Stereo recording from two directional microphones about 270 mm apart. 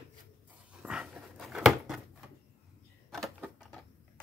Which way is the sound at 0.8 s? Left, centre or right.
Centre.